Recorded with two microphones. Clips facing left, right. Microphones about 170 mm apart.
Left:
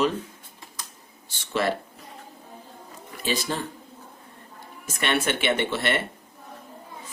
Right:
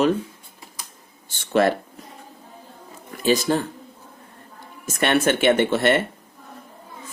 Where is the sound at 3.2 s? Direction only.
45° right (ahead or behind).